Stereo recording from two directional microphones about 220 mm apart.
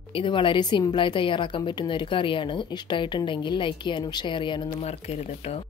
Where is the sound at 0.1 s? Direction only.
20° left (ahead or behind).